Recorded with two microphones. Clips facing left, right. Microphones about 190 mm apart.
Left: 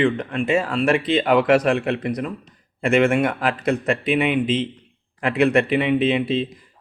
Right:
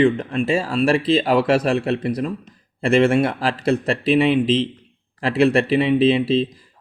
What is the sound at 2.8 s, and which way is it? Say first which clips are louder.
Speech: right 2 dB; 30° right (ahead or behind).